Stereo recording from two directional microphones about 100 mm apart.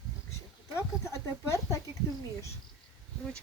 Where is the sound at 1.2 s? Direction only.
30° left (ahead or behind).